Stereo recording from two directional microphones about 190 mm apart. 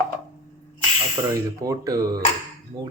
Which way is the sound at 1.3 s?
20° right (ahead or behind).